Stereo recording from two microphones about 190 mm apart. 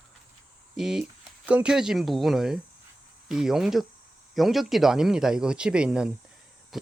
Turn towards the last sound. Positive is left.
turn(degrees=0)  # may be behind; listen again after turning